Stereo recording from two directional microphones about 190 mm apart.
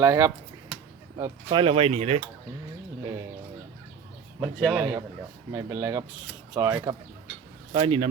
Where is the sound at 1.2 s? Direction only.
25° right (ahead or behind).